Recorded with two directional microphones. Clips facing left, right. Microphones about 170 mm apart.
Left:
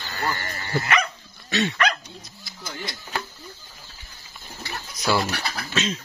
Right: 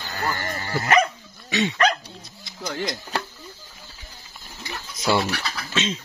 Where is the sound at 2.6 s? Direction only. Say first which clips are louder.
Right 7 dB; 90° right.